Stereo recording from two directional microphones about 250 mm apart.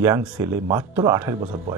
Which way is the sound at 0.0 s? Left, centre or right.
Centre.